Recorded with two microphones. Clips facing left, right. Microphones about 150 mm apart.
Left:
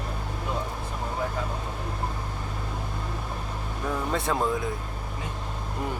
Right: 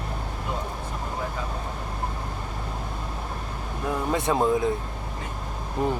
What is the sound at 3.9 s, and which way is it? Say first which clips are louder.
Vehicle: right 3 dB; 20° right (ahead or behind).